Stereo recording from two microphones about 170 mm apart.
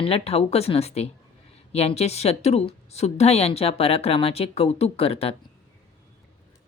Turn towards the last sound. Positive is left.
turn(degrees=35)  # may be behind; listen again after turning